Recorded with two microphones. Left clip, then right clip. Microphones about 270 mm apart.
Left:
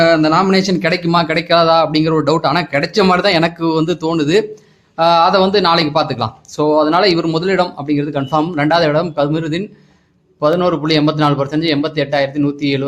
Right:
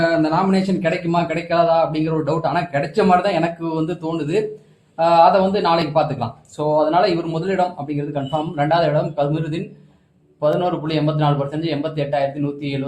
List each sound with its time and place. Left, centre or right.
0.0 s speech: left
10.6 s speech: left